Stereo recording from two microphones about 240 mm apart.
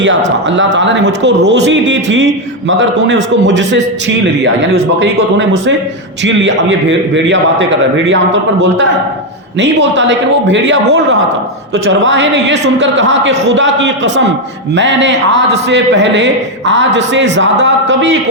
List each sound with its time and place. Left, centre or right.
0.4 s a man's voice: right
9.6 s a man's voice: right